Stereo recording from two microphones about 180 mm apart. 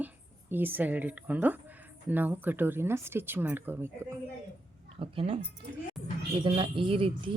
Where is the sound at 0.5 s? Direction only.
10° right (ahead or behind).